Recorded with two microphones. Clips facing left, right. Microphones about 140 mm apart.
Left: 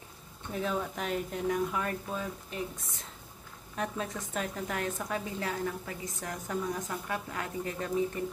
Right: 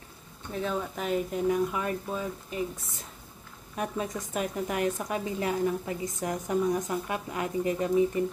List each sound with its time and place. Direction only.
0.5 s speech: centre (ahead or behind)
3.7 s a woman's voice: 10° right (ahead or behind)